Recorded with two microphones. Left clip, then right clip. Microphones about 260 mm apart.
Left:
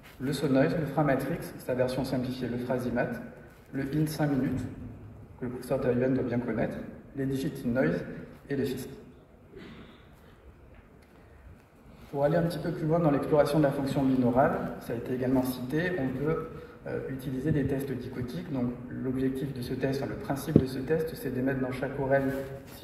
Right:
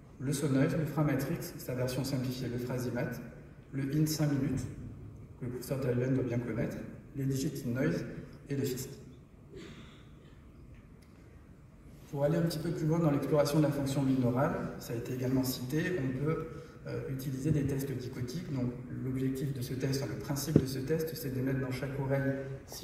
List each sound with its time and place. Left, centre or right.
0.3 s a man's voice: right
12.2 s a man's voice: right